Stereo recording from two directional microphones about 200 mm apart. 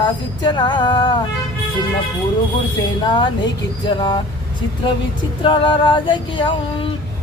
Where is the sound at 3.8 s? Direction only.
20° left (ahead or behind).